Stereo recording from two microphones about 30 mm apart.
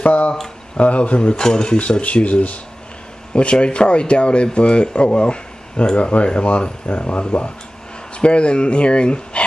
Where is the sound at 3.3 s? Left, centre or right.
Left.